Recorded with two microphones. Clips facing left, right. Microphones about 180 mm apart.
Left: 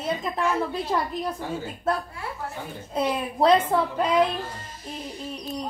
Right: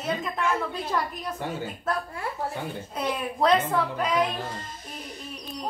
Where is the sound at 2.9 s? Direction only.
30° left (ahead or behind).